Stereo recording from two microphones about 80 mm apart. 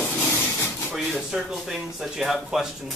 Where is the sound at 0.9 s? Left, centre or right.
Centre.